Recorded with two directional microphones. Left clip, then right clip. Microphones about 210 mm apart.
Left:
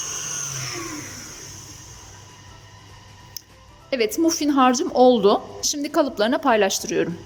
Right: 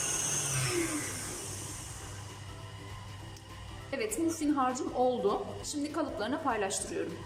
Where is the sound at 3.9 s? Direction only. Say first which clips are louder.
Left 12 dB; 45° left (ahead or behind).